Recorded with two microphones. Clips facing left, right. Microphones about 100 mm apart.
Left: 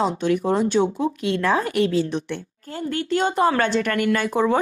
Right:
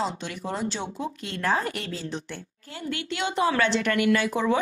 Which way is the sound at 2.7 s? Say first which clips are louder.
Left 8 dB; 40° left (ahead or behind).